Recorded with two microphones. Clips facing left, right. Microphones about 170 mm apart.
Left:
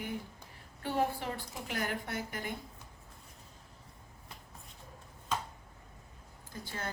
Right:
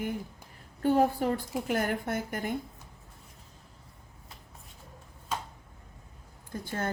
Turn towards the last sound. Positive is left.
turn(degrees=-55)  # may be behind; listen again after turning